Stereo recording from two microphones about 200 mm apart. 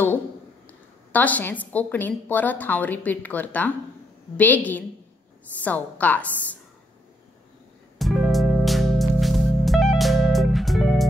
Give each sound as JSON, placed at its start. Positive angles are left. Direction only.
{"t": 0.7, "sound": "a woman's voice", "side_deg": 10}
{"t": 8.0, "sound": "music", "side_deg": 0}